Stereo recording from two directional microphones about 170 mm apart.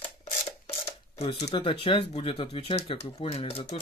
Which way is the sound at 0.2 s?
35° left (ahead or behind).